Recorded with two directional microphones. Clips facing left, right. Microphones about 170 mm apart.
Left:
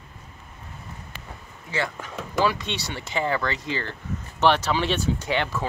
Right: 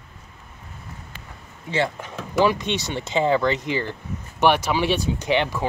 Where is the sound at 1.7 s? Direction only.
25° right (ahead or behind).